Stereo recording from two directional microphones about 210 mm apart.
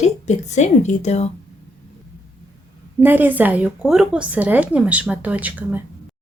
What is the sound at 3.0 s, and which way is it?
A woman's voice, 10° right (ahead or behind).